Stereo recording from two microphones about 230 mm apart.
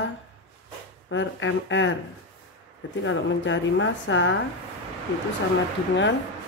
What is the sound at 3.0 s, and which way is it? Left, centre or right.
A woman's voice, left.